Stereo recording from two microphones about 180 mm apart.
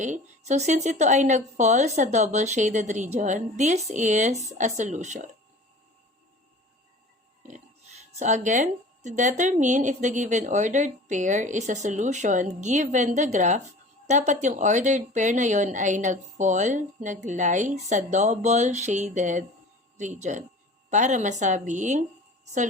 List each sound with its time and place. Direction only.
0.0 s speech: 40° right (ahead or behind)
8.2 s a woman's voice: 45° right (ahead or behind)